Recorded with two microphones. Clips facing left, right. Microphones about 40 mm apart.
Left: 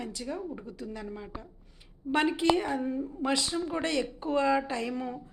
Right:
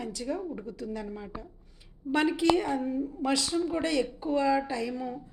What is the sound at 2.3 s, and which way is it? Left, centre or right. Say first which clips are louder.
Speech: right 1 dB; left.